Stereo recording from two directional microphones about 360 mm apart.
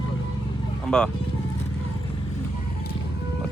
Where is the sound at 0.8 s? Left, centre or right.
Centre.